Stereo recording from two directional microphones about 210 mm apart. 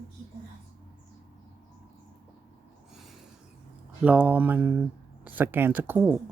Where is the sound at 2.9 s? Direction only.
Centre (ahead or behind).